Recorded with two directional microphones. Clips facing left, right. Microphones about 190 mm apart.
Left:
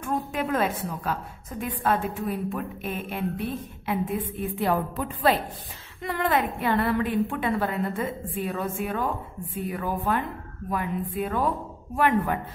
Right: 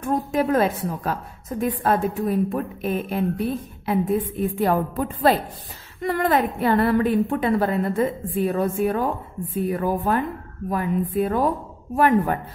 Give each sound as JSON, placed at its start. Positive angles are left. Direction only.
{"t": 0.0, "sound": "a woman's voice", "side_deg": -40}